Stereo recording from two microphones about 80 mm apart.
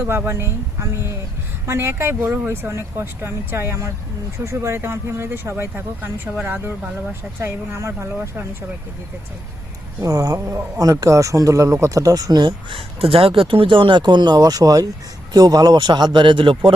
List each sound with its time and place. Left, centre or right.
0.0 s speech: right
7.1 s speech: right
10.0 s speech: right
10.4 s speech: right
11.0 s speech: right
12.3 s speech: right
13.3 s speech: right